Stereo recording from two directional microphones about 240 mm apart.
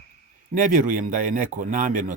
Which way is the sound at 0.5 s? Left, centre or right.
Right.